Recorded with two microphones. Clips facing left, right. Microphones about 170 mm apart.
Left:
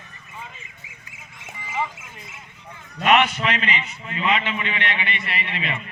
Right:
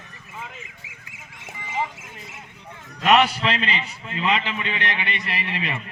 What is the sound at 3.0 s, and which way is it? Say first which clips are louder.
A man's voice: right 1 dB; 35° right (ahead or behind).